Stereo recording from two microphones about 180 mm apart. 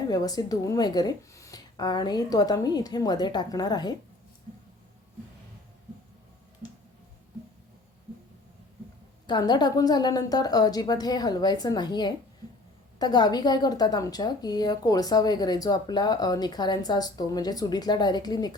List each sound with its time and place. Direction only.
0.1 s a woman's voice: 20° left (ahead or behind)
6.6 s music: 20° left (ahead or behind)
9.2 s a woman's voice: 25° left (ahead or behind)